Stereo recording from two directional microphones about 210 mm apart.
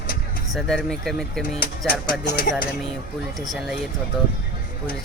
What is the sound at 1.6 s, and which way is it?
Speech, 45° left (ahead or behind).